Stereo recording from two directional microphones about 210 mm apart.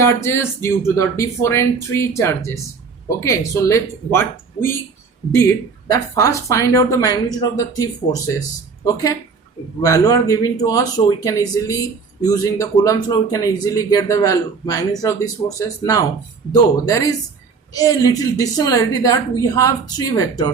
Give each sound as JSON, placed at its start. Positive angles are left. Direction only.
{"t": 0.0, "sound": "a man's voice", "side_deg": 10}
{"t": 5.9, "sound": "a man's voice", "side_deg": 15}
{"t": 9.8, "sound": "a man's voice", "side_deg": 15}